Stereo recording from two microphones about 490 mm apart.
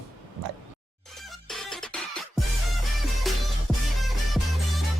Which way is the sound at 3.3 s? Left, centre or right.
Centre.